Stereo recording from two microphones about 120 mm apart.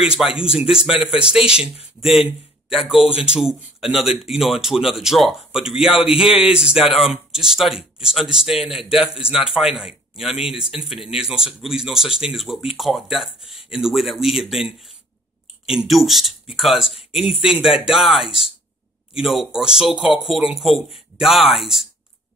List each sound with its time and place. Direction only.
0.0 s speech: 5° right (ahead or behind)